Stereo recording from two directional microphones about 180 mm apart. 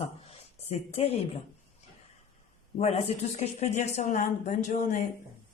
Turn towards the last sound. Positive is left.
turn(degrees=45)  # may be behind; listen again after turning